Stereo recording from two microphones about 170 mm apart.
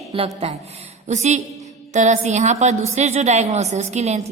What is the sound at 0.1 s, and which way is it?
A woman's voice, 35° right (ahead or behind).